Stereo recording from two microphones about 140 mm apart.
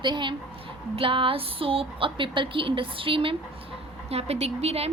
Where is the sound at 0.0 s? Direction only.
35° right (ahead or behind).